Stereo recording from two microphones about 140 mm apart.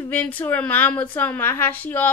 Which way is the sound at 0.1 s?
10° left (ahead or behind).